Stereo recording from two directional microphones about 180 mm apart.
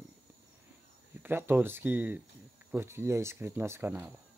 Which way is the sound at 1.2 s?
10° right (ahead or behind).